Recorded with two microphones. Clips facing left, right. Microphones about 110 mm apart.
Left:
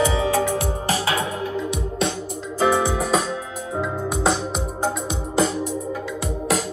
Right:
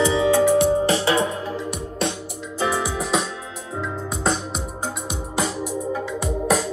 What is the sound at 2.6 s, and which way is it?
Music, 25° left (ahead or behind).